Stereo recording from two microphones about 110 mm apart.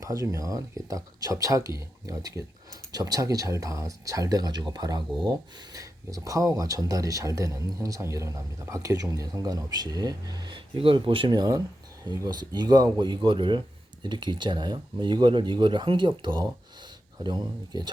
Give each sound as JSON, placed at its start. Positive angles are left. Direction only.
{"t": 0.0, "sound": "speech", "side_deg": -30}